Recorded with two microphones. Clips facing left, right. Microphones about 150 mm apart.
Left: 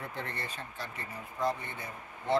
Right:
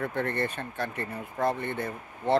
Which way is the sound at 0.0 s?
55° right (ahead or behind).